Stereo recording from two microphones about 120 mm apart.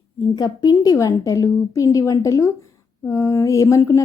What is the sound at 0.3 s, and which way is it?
A woman's voice, 35° left (ahead or behind).